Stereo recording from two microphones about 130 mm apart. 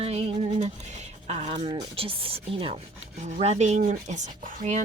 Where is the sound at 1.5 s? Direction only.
45° right (ahead or behind).